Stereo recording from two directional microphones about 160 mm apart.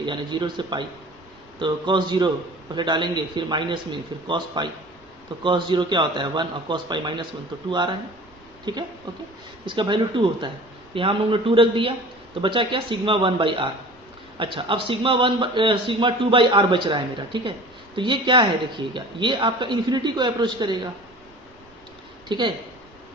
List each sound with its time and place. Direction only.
0.0 s a man's voice: 30° right (ahead or behind)
22.3 s speech: 30° right (ahead or behind)